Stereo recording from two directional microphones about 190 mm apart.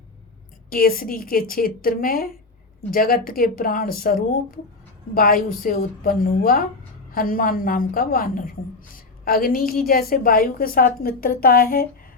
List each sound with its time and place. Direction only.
0.7 s a woman's voice: 50° left (ahead or behind)